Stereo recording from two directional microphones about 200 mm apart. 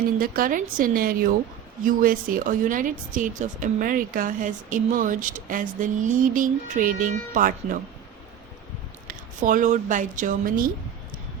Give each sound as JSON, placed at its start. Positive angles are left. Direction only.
{"t": 0.2, "sound": "a woman's voice", "side_deg": -45}
{"t": 9.0, "sound": "speech", "side_deg": -40}